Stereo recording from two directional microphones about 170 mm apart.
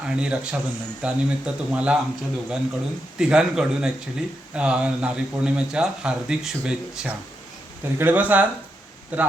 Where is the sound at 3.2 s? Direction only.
5° right (ahead or behind).